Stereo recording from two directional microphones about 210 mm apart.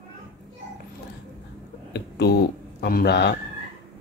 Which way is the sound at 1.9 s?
50° left (ahead or behind).